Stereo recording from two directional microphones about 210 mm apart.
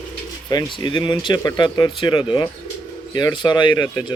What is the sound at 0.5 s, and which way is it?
Speech, 20° left (ahead or behind).